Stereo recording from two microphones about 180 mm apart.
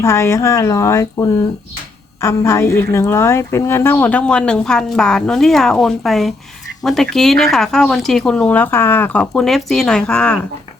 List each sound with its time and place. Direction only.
0.0 s a woman's voice: 15° left (ahead or behind)